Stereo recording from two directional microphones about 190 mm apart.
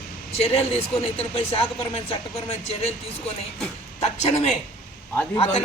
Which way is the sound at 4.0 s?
35° left (ahead or behind).